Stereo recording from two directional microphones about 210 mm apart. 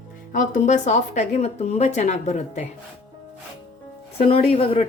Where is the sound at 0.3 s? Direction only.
35° left (ahead or behind).